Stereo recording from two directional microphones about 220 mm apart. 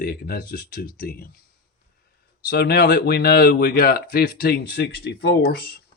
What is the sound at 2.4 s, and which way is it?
Speech, 50° left (ahead or behind).